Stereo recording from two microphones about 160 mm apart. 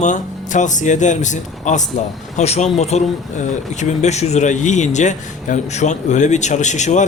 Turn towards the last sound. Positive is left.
turn(degrees=50)  # may be behind; listen again after turning